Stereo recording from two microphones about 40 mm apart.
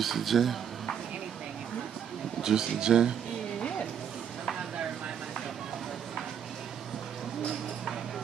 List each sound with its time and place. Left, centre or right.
0.0 s speech: centre
2.4 s speech: centre